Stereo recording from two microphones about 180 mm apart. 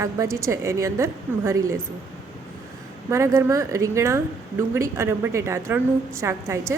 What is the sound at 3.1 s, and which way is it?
A woman's voice, 15° right (ahead or behind).